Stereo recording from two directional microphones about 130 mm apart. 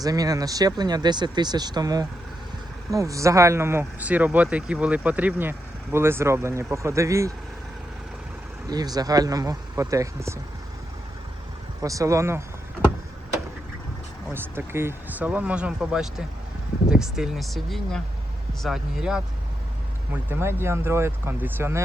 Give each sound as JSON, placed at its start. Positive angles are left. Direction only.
{"t": 0.0, "sound": "speech", "side_deg": -30}
{"t": 8.6, "sound": "speech", "side_deg": -30}
{"t": 11.8, "sound": "speech", "side_deg": -25}
{"t": 14.3, "sound": "speech", "side_deg": -20}
{"t": 20.3, "sound": "speech", "side_deg": -20}